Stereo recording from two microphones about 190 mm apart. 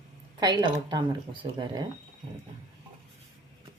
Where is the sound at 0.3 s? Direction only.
25° right (ahead or behind).